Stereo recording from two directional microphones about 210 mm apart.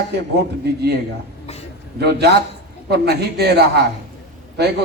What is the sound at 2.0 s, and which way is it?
A man's voice, 50° right (ahead or behind).